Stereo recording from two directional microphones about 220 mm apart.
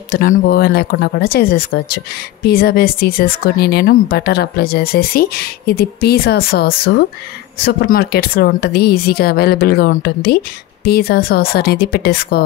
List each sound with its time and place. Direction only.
0.5 s speech: 45° left (ahead or behind)